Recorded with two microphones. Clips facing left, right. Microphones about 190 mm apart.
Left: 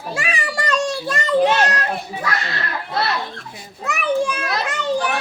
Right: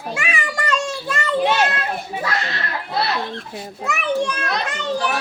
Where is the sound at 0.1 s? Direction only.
35° left (ahead or behind).